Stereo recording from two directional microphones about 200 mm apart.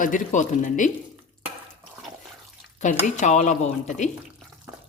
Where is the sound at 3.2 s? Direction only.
35° left (ahead or behind).